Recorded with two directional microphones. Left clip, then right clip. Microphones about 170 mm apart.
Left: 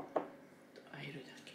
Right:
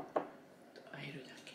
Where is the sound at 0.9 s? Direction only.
Centre (ahead or behind).